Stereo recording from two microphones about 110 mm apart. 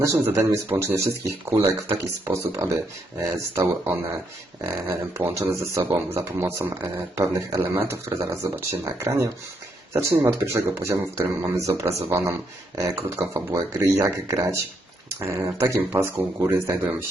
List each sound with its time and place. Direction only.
0.0 s speech: 25° right (ahead or behind)